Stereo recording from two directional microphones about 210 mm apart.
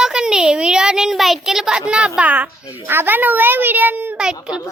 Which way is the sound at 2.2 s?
10° right (ahead or behind).